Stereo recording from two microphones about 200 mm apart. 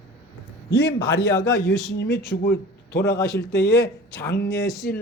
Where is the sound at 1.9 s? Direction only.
50° left (ahead or behind).